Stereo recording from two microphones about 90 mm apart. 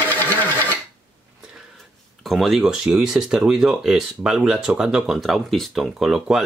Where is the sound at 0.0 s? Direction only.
20° left (ahead or behind).